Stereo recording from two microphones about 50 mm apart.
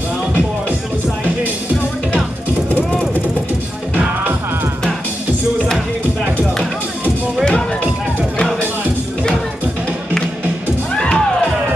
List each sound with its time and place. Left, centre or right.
11.0 s music: centre